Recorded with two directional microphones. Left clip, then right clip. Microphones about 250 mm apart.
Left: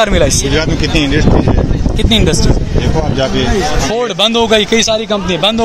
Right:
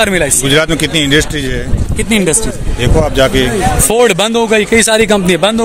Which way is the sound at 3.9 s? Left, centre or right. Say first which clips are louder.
Right 5 dB; right.